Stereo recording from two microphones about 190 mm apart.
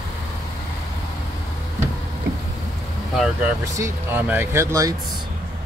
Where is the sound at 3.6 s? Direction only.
15° right (ahead or behind).